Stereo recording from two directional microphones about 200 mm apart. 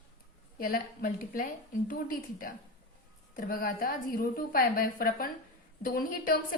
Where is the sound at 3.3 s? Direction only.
45° left (ahead or behind).